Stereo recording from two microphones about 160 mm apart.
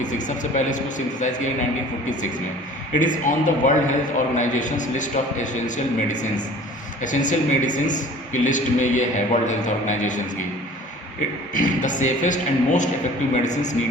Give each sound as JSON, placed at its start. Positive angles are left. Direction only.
{"t": 0.0, "sound": "a man's voice", "side_deg": 50}
{"t": 3.0, "sound": "a man's voice", "side_deg": 55}
{"t": 11.5, "sound": "a man's voice", "side_deg": 55}